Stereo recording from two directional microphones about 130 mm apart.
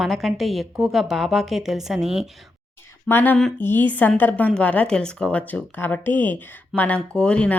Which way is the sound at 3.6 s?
15° left (ahead or behind).